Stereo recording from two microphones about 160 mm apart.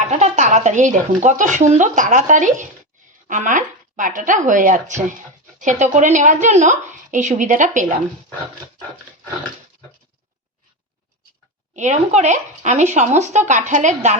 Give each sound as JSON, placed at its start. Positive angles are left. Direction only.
{"t": 0.1, "sound": "speech", "side_deg": -45}
{"t": 11.7, "sound": "speech", "side_deg": -50}